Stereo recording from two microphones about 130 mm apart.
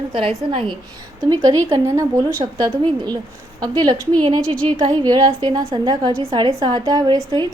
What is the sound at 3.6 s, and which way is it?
A woman's voice, 30° right (ahead or behind).